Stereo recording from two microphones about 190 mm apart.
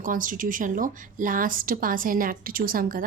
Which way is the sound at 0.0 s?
45° right (ahead or behind).